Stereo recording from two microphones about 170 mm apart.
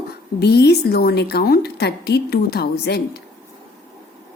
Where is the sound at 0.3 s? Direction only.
70° left (ahead or behind).